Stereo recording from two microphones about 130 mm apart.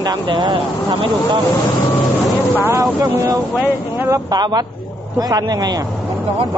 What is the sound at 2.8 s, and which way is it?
Speech, 25° right (ahead or behind).